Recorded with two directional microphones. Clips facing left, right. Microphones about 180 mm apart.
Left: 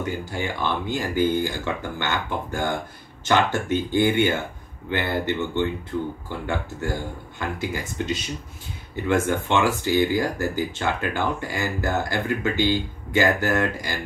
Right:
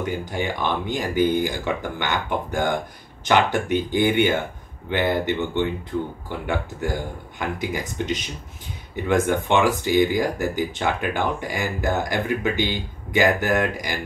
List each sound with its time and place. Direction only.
0.0 s speech: 20° right (ahead or behind)